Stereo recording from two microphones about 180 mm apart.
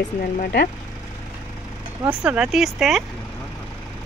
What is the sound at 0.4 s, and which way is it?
Speech, 65° left (ahead or behind).